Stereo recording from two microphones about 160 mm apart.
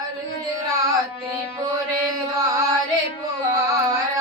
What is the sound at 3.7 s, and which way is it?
Music, 20° right (ahead or behind).